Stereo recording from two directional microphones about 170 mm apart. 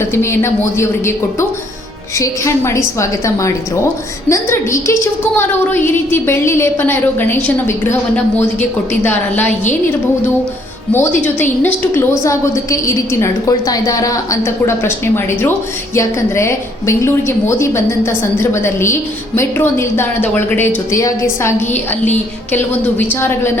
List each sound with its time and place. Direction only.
0.0 s a woman's voice: 15° left (ahead or behind)
10.9 s a woman's voice: 10° left (ahead or behind)
23.2 s a woman's voice: 15° left (ahead or behind)